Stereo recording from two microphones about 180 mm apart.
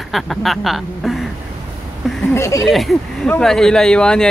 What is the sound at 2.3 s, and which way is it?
Speech, 15° left (ahead or behind).